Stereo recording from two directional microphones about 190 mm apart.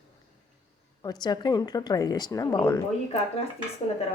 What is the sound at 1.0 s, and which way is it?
Speech, 20° left (ahead or behind).